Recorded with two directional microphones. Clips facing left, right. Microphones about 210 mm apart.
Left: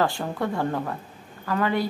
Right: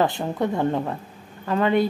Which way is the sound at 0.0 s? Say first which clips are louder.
Right 3 dB; 20° right (ahead or behind).